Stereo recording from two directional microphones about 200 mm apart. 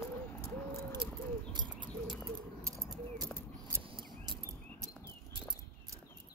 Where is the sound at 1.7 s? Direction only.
5° left (ahead or behind).